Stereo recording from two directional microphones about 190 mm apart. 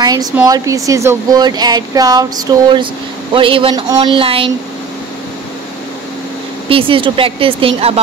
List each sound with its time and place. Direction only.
0.0 s a woman's voice: 20° right (ahead or behind)
6.7 s speech: 30° right (ahead or behind)